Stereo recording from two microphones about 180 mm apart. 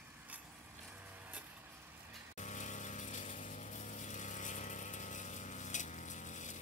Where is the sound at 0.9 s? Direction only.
10° right (ahead or behind).